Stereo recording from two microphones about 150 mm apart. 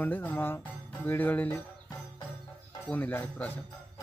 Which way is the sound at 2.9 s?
10° left (ahead or behind).